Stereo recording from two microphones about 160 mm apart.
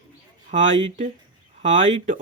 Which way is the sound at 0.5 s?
50° right (ahead or behind).